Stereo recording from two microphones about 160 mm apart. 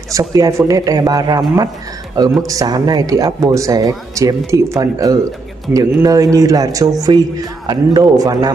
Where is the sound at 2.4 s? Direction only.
20° right (ahead or behind).